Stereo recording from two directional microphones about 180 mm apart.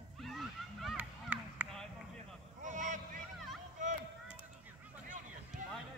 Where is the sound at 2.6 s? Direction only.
45° right (ahead or behind).